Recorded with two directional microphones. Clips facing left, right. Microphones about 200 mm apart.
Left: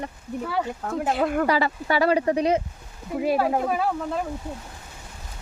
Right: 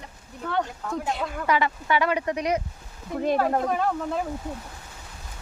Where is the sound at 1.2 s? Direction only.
60° left (ahead or behind).